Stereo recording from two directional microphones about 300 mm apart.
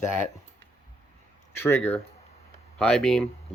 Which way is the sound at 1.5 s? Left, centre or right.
Centre.